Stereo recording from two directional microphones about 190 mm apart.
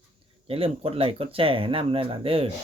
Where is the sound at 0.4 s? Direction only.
30° right (ahead or behind).